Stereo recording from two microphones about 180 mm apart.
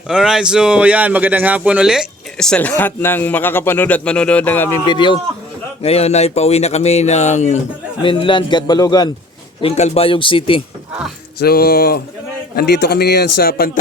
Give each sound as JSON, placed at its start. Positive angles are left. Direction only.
{"t": 0.1, "sound": "speech", "side_deg": -5}
{"t": 4.9, "sound": "a man's voice", "side_deg": 25}
{"t": 8.0, "sound": "a man's voice", "side_deg": 30}
{"t": 9.6, "sound": "a man's voice", "side_deg": 35}
{"t": 11.3, "sound": "a man's voice", "side_deg": 60}